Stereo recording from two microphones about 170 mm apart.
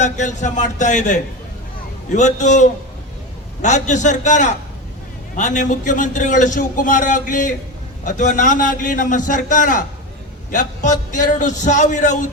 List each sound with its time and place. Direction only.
0.0 s a man's voice: 45° left (ahead or behind)